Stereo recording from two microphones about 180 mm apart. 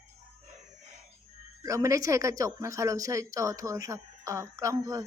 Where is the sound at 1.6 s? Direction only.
15° right (ahead or behind).